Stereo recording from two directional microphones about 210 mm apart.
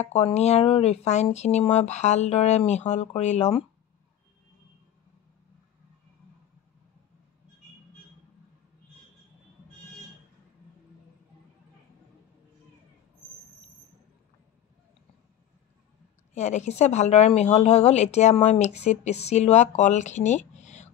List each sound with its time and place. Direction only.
0.0 s speech: 35° left (ahead or behind)
16.3 s speech: 35° left (ahead or behind)